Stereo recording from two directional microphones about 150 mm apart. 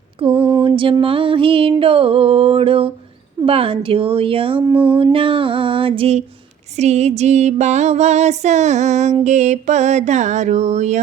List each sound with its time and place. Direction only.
0.2 s a sound: 35° right (ahead or behind)
0.6 s speech: 35° right (ahead or behind)
6.7 s music: 45° right (ahead or behind)